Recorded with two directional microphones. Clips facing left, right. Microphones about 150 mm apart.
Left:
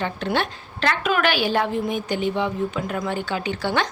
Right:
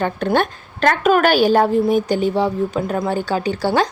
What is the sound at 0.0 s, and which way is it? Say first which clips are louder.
A woman's voice: right 6 dB; 50° right (ahead or behind).